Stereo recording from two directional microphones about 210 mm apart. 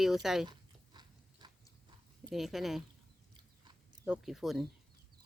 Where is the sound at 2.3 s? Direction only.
Centre (ahead or behind).